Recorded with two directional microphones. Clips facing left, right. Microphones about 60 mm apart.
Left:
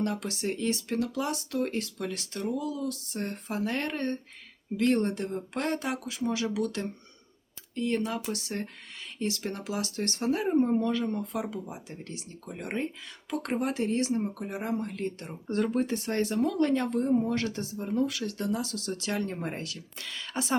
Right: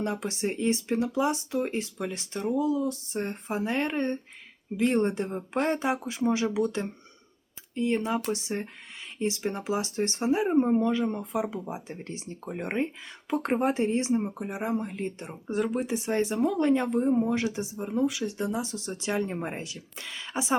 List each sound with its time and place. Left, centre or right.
0.0 s speech: right